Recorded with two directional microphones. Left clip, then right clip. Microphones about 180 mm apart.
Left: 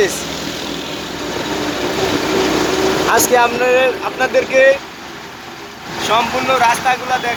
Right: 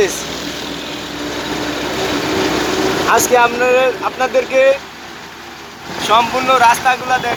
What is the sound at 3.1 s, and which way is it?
Speech, 10° right (ahead or behind).